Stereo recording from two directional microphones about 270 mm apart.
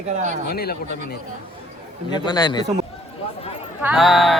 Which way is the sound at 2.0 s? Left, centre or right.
Centre.